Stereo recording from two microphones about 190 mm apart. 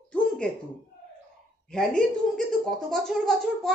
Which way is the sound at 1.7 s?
5° left (ahead or behind).